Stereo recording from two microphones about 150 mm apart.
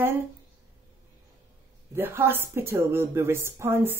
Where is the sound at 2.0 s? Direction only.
15° right (ahead or behind).